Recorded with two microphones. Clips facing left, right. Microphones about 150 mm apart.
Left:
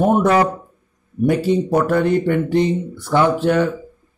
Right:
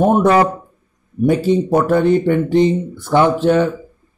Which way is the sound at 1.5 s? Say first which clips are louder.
Right 2 dB; 25° right (ahead or behind).